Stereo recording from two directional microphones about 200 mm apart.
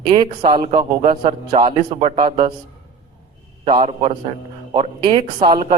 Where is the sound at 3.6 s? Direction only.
25° right (ahead or behind).